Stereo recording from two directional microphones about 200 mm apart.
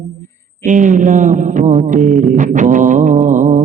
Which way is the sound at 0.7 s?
40° right (ahead or behind).